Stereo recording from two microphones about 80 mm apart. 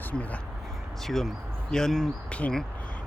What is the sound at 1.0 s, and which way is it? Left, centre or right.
Speech, centre.